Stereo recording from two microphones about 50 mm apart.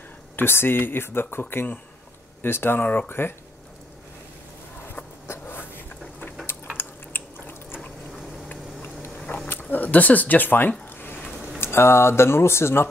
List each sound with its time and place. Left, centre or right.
0.4 s speech: left
6.8 s drip: left
9.5 s speech: left
10.9 s a sound: left
11.6 s speech: left